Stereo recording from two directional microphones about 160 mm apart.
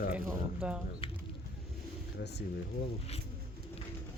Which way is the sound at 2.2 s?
90° left.